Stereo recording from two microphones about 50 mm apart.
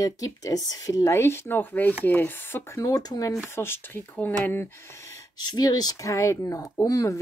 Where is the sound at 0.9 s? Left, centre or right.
Left.